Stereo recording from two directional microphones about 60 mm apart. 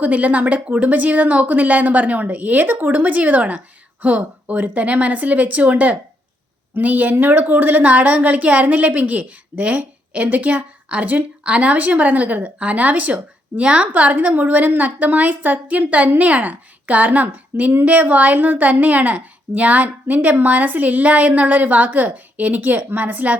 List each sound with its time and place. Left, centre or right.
0.0 s a woman's voice: right